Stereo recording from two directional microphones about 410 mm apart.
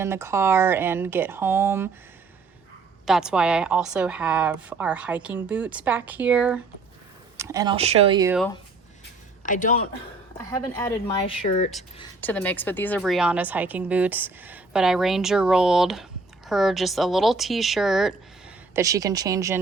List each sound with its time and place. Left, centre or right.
0.0 s a woman's voice: centre
3.1 s a woman's voice: centre
9.4 s speech: centre
10.4 s a woman's voice: centre